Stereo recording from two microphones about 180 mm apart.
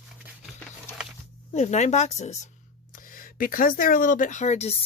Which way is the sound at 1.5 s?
40° left (ahead or behind).